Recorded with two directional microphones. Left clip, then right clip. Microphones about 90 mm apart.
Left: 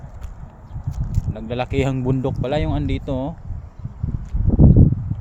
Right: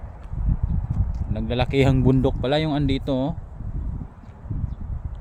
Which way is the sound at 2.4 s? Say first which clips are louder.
Even; 45° right (ahead or behind).